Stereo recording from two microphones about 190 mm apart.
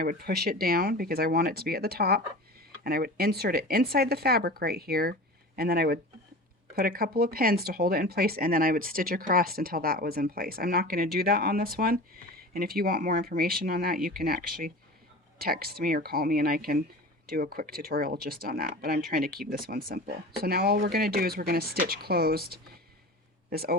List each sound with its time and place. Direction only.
0.0 s speech: 50° right (ahead or behind)